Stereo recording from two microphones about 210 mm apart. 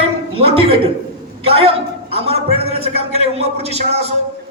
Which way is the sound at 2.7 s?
30° right (ahead or behind).